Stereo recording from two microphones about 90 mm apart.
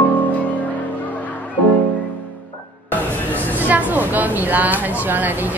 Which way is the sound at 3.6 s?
20° right (ahead or behind).